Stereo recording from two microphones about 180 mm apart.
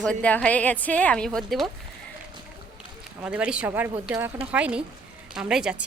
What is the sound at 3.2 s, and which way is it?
A woman's voice, 5° right (ahead or behind).